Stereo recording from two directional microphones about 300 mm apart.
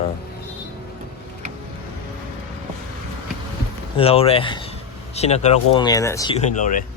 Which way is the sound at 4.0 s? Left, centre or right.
Centre.